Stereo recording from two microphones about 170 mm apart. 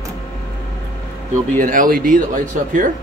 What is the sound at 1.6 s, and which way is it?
Speech, 55° right (ahead or behind).